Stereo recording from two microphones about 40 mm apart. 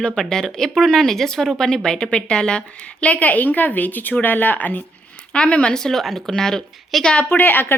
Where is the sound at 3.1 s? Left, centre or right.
Left.